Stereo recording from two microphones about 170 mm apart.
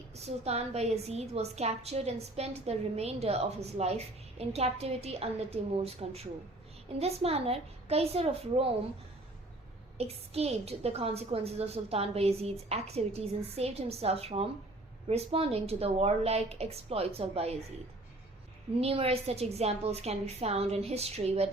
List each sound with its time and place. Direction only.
0.1 s a woman's voice: 40° right (ahead or behind)
10.0 s a woman's voice: 35° right (ahead or behind)
18.8 s a woman's voice: 35° right (ahead or behind)